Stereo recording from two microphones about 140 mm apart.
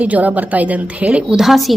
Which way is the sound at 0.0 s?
10° right (ahead or behind).